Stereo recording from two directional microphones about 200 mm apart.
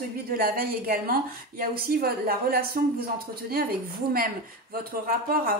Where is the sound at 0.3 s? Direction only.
45° right (ahead or behind).